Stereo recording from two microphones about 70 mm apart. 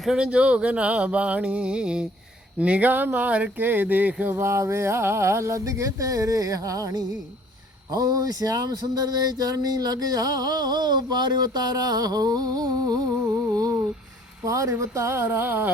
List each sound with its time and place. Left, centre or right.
0.0 s speech: centre
4.4 s speech: right
7.9 s a sound: right
14.4 s speech: right